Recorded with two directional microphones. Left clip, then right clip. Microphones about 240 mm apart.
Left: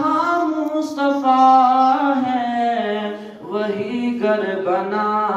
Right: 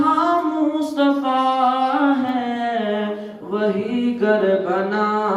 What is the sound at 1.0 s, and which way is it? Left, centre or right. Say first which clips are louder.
Singing: left 4 dB; right.